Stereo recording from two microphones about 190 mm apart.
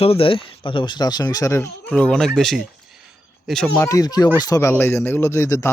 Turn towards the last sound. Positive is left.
turn(degrees=15)  # may be behind; listen again after turning